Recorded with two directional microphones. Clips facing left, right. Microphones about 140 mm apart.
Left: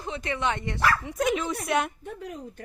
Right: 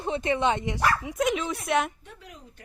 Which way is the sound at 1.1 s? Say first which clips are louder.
Even; centre (ahead or behind).